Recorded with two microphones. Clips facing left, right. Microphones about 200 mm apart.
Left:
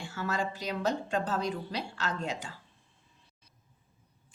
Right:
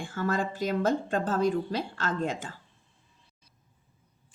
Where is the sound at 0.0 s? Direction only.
50° right (ahead or behind).